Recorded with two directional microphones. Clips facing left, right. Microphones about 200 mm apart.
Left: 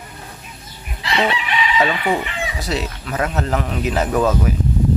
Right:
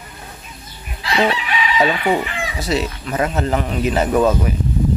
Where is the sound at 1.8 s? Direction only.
5° right (ahead or behind).